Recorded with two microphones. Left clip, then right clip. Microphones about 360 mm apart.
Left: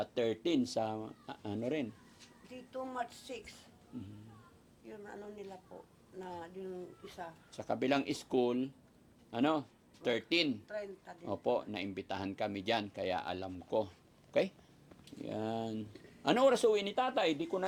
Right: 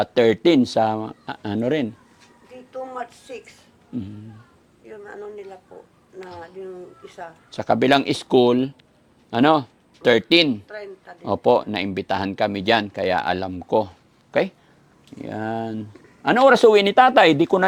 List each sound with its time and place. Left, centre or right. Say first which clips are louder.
0.0 s speech: right 18 dB; right
0.7 s speech: right 17 dB; right
2.7 s speech: right 10 dB; left
4.9 s a woman's voice: right 13 dB; left
7.5 s speech: right 17 dB; right
10.7 s a man's voice: right 8 dB; left
11.3 s speech: right 17 dB; right